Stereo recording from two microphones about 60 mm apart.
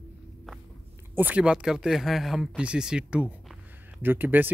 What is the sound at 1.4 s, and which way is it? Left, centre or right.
Speech, centre.